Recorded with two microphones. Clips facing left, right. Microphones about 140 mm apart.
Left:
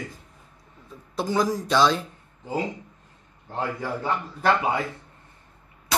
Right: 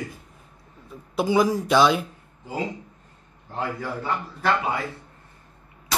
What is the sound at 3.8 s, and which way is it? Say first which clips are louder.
Speech: left 1 dB; 20° left (ahead or behind).